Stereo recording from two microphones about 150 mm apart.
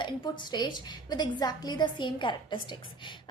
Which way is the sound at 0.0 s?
30° left (ahead or behind).